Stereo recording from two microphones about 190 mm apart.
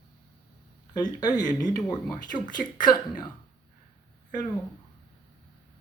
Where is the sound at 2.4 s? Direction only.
45° left (ahead or behind).